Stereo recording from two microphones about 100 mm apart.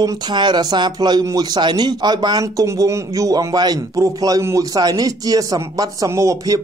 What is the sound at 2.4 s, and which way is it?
Speech, 35° right (ahead or behind).